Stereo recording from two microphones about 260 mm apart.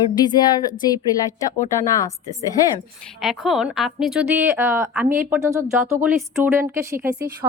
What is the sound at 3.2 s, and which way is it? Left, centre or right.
A woman's voice, centre.